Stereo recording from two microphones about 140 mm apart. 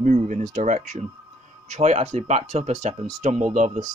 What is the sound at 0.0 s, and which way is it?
Speech, 65° right (ahead or behind).